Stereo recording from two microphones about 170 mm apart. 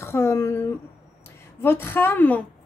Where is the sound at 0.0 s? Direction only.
15° left (ahead or behind).